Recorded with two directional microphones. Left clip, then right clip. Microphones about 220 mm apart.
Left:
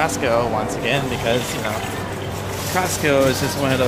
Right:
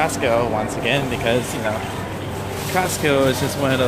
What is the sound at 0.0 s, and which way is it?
Speech, 10° right (ahead or behind).